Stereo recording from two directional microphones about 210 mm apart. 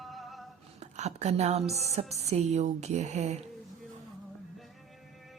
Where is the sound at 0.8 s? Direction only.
35° right (ahead or behind).